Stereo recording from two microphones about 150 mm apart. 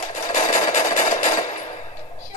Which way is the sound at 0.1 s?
50° left (ahead or behind).